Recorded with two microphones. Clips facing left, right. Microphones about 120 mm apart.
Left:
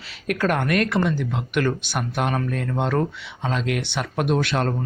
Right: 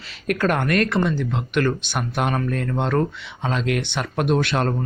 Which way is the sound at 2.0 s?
Centre (ahead or behind).